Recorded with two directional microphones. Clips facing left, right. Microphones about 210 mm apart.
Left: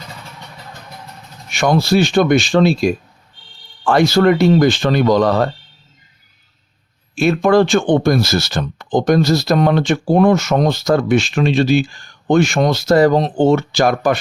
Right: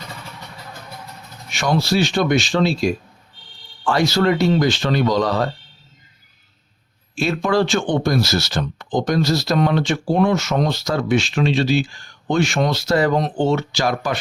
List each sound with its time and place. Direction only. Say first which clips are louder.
1.5 s speech: left 5 dB; 55° left (ahead or behind)
7.2 s speech: left 6 dB; 55° left (ahead or behind); by 13.3 s 35° left (ahead or behind)
13.3 s speech: left 6 dB; 50° left (ahead or behind)